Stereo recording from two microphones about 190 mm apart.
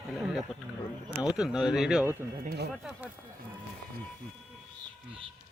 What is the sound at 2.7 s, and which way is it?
Speech, centre (ahead or behind).